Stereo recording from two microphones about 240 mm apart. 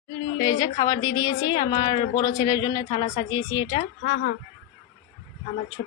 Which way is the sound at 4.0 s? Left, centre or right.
Left.